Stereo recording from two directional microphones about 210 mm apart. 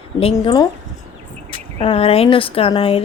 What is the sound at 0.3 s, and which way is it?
Speech, 20° left (ahead or behind).